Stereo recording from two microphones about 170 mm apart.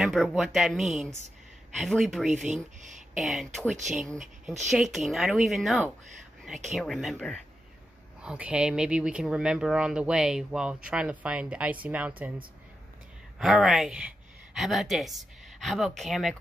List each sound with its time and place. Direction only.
0.0 s speech: centre (ahead or behind)
13.4 s a woman's voice: centre (ahead or behind)